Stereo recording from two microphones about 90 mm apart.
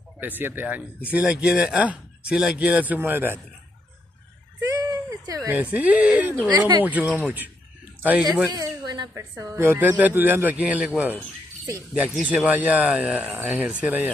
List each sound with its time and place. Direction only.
0.2 s a man's voice: 20° right (ahead or behind)
4.7 s a sound: 45° right (ahead or behind)
5.5 s speech: 20° right (ahead or behind)
8.5 s a sound: 50° right (ahead or behind)
9.1 s a woman's voice: 35° right (ahead or behind)
9.6 s a man's voice: 20° right (ahead or behind)
12.1 s speech: 15° right (ahead or behind)